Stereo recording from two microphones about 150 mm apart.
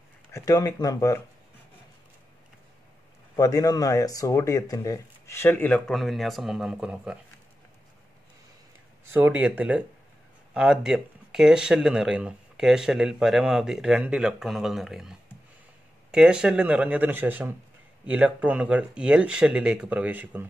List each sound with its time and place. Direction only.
0.3 s speech: 20° left (ahead or behind)
3.3 s speech: 25° left (ahead or behind); by 7.2 s 5° right (ahead or behind)
9.0 s speech: 15° right (ahead or behind)